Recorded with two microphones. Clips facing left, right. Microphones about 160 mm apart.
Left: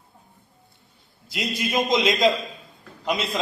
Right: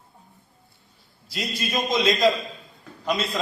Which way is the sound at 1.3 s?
20° left (ahead or behind).